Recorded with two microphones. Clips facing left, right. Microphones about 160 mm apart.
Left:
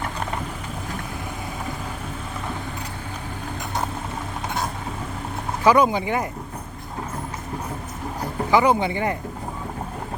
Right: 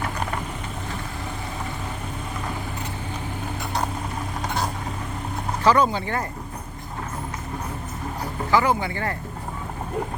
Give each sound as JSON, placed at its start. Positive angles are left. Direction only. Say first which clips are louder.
{"t": 5.6, "sound": "speech", "louder": "left 2 dB", "side_deg": 15}
{"t": 8.4, "sound": "speech", "louder": "left 3 dB", "side_deg": 20}